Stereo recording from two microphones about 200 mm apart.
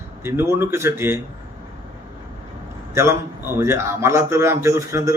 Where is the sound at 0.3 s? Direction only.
10° right (ahead or behind).